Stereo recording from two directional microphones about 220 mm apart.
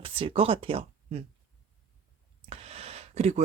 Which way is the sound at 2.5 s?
30° right (ahead or behind).